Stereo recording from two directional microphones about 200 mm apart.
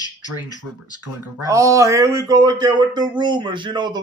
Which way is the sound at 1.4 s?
15° right (ahead or behind).